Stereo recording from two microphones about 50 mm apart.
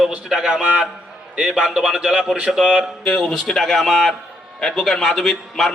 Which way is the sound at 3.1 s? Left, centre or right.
Centre.